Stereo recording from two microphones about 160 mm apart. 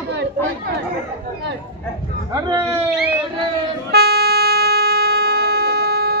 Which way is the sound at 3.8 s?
90° right.